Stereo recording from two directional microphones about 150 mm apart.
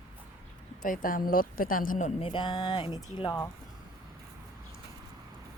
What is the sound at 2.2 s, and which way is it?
Speech, 30° left (ahead or behind).